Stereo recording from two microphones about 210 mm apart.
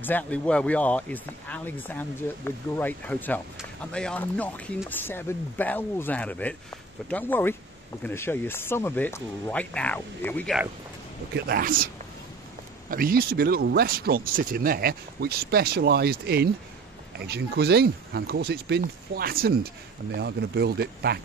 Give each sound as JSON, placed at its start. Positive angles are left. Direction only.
{"t": 0.0, "sound": "speech", "side_deg": 5}
{"t": 11.3, "sound": "speech", "side_deg": -45}
{"t": 12.9, "sound": "speech", "side_deg": -45}